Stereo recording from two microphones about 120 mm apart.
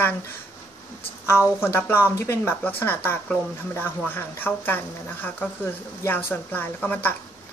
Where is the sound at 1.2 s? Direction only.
20° left (ahead or behind).